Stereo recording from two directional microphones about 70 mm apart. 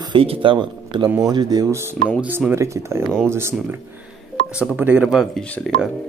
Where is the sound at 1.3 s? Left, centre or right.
Right.